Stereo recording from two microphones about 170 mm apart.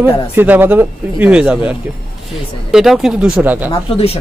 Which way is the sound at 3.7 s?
35° left (ahead or behind).